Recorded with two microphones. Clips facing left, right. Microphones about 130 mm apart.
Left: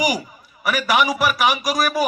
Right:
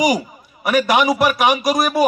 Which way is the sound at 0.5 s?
40° right (ahead or behind).